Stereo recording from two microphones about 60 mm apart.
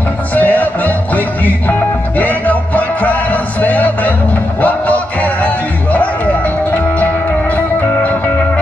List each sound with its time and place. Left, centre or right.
0.3 s music: left